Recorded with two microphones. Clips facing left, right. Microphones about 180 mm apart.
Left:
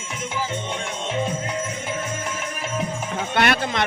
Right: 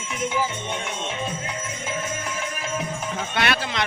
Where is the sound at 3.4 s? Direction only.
50° left (ahead or behind).